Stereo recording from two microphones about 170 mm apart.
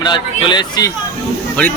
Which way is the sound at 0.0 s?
25° left (ahead or behind).